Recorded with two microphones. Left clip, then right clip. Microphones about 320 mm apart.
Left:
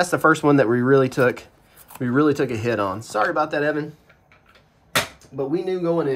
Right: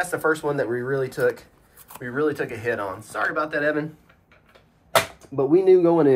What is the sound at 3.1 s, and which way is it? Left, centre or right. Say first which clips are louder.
Speech: left 3 dB; centre.